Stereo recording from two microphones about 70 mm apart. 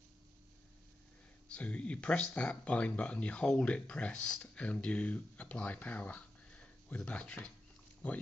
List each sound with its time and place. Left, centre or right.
1.5 s speech: centre